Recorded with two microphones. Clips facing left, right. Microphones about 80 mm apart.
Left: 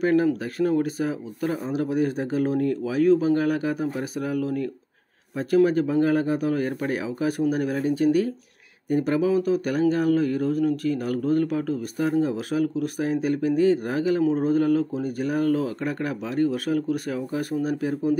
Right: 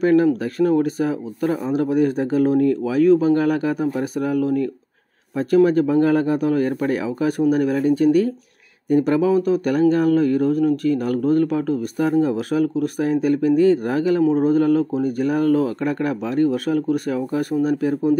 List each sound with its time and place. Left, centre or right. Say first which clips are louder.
0.0 s speech: right 5 dB; right